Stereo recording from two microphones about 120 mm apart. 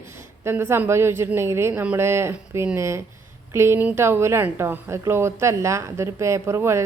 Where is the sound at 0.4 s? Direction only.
20° right (ahead or behind).